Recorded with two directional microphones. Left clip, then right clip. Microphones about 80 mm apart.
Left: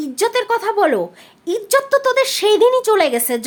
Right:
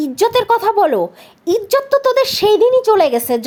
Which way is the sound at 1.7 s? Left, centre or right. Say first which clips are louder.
Even; right.